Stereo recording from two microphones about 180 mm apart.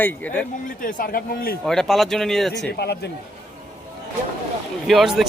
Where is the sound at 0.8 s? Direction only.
50° left (ahead or behind).